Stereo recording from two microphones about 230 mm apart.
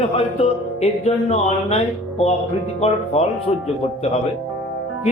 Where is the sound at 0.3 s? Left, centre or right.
Left.